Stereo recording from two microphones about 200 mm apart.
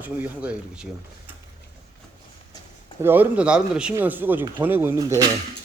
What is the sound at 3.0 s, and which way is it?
Speech, 10° right (ahead or behind).